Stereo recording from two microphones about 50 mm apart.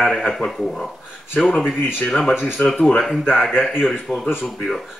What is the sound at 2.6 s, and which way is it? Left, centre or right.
Speech, left.